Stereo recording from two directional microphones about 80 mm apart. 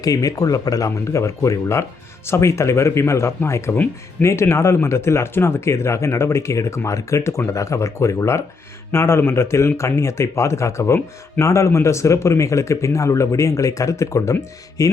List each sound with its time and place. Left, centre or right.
0.0 s a man's voice: left